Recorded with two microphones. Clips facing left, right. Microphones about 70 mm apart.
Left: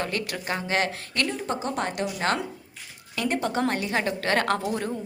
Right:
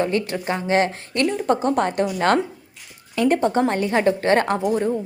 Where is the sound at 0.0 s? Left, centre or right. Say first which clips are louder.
Right 8 dB; right.